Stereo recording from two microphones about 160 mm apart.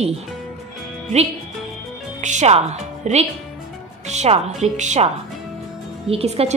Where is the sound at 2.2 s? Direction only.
45° right (ahead or behind).